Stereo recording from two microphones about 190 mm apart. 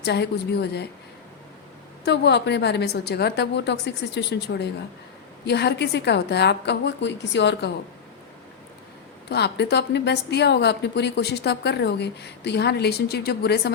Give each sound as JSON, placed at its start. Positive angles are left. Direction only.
{"t": 0.0, "sound": "a woman's voice", "side_deg": 65}
{"t": 2.0, "sound": "a woman's voice", "side_deg": 65}
{"t": 9.3, "sound": "a woman's voice", "side_deg": 60}